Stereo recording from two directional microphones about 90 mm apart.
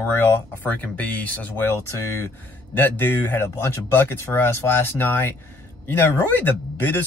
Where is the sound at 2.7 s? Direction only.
25° left (ahead or behind).